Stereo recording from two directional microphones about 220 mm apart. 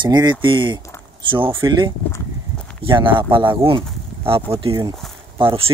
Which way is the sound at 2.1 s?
5° left (ahead or behind).